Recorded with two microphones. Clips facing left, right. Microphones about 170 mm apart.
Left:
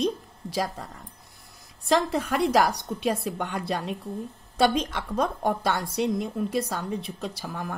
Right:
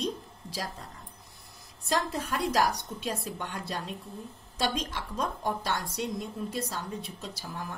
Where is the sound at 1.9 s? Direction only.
80° left.